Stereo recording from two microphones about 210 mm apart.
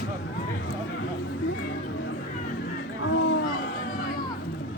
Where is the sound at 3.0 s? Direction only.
65° left (ahead or behind).